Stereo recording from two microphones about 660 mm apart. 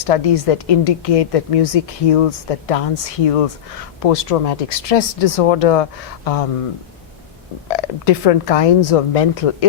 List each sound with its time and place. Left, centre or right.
0.0 s speech: left
7.8 s speech: left